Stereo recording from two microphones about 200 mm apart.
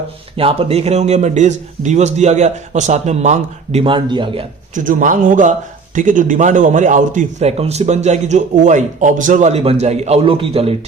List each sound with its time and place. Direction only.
0.3 s a man's voice: 30° right (ahead or behind)
4.7 s a man's voice: 40° right (ahead or behind)